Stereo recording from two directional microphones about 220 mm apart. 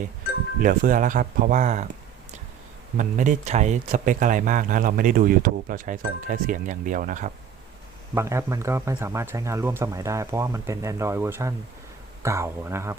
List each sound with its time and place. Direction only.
0.6 s speech: 40° right (ahead or behind)
3.0 s speech: 35° right (ahead or behind)
8.1 s speech: 10° right (ahead or behind)